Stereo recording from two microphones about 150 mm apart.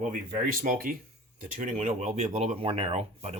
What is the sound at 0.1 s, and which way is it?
Speech, 65° right (ahead or behind).